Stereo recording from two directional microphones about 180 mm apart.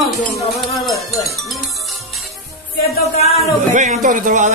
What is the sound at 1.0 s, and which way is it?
Speech, 15° left (ahead or behind).